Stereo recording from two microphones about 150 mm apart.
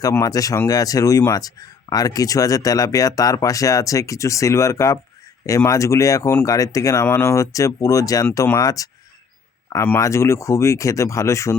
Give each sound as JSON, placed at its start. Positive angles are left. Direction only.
{"t": 0.0, "sound": "speech", "side_deg": 25}